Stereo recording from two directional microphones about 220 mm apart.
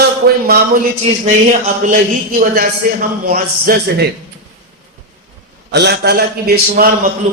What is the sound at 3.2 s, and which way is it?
Speech, 45° right (ahead or behind).